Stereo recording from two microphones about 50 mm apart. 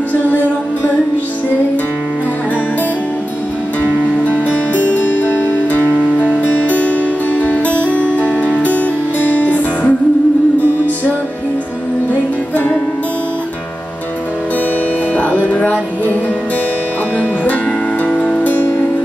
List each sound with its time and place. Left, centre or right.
4.2 s music: left
12.1 s music: left
15.6 s music: left
18.0 s music: left